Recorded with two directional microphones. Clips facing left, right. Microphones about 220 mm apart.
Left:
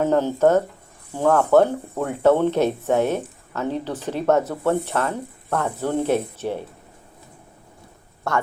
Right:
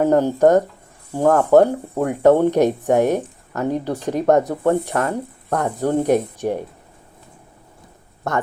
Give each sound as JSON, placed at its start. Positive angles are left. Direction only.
{"t": 0.0, "sound": "speech", "side_deg": -15}
{"t": 8.3, "sound": "speech", "side_deg": -20}